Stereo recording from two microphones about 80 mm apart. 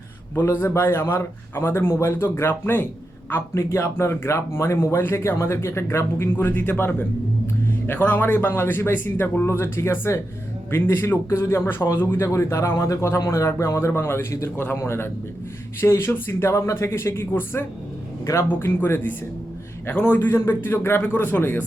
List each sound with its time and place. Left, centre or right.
0.3 s speech: left